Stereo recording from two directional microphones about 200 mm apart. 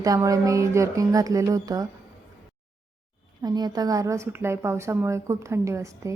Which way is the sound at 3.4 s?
20° right (ahead or behind).